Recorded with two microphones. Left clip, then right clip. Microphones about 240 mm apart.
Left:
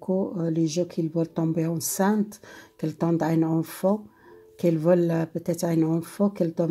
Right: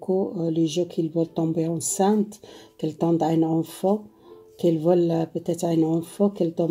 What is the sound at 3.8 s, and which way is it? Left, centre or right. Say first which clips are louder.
Speech: right 1 dB; left.